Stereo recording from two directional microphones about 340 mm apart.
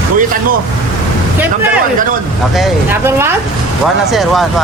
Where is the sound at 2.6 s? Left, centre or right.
Centre.